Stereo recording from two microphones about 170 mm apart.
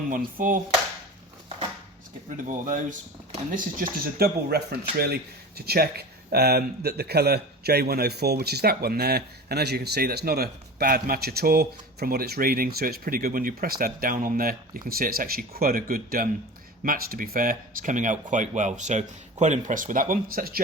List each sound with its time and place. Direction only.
0.1 s speech: 55° right (ahead or behind)
2.5 s speech: 50° right (ahead or behind)